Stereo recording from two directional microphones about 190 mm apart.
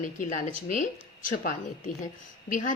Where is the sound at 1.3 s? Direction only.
45° left (ahead or behind).